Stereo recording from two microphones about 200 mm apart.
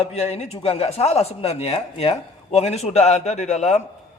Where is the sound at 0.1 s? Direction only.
30° left (ahead or behind).